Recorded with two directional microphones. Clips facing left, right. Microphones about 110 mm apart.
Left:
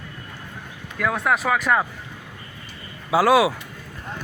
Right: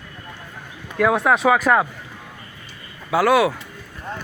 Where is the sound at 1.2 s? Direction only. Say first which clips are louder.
Right 2 dB; centre (ahead or behind).